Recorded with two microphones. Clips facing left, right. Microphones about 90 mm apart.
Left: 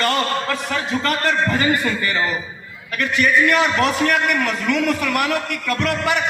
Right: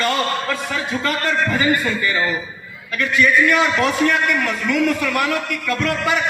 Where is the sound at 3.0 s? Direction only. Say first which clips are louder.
Right 1 dB; 55° left (ahead or behind).